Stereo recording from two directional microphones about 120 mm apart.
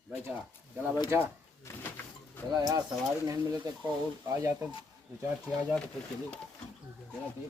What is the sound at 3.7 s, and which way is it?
Speech, 30° right (ahead or behind).